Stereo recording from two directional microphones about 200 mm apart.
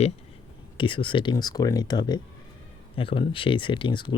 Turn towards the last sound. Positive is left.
turn(degrees=25)  # may be behind; listen again after turning